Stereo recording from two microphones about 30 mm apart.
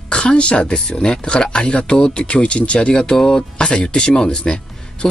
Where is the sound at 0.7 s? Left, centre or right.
Left.